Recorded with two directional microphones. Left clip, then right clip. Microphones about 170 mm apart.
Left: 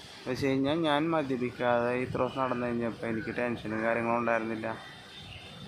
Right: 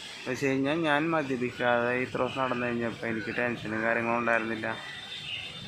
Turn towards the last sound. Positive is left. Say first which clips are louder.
# right 2 dB
turn(degrees=0)  # may be behind; listen again after turning